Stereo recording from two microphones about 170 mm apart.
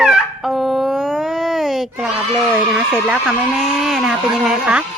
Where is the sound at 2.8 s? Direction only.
5° right (ahead or behind).